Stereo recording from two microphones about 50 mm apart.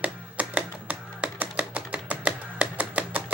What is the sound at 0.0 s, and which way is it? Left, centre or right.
Music, right.